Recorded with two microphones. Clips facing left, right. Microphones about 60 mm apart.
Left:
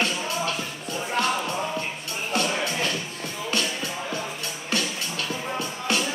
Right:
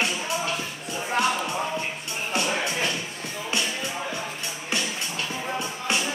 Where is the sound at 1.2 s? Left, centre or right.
Right.